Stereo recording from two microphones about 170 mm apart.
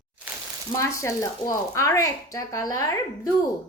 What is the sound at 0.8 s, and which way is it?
A woman's voice, 15° left (ahead or behind).